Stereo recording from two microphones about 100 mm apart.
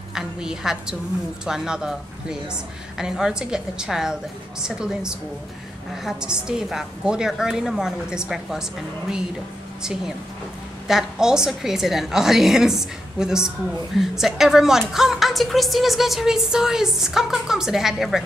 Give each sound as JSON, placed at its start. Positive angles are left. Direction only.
{"t": 0.1, "sound": "a woman's voice", "side_deg": -5}
{"t": 10.9, "sound": "a woman's voice", "side_deg": -5}